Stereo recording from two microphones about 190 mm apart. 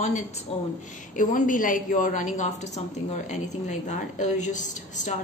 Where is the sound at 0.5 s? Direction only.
30° left (ahead or behind).